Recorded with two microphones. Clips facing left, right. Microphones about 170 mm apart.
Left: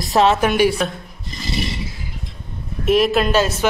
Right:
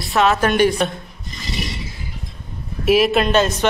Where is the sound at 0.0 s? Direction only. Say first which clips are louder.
Left 2 dB; 35° left (ahead or behind).